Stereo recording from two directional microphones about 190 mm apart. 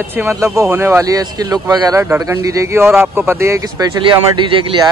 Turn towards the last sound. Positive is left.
turn(degrees=-25)  # may be behind; listen again after turning